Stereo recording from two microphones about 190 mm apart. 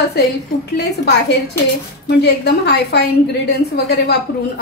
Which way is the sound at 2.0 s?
60° left (ahead or behind).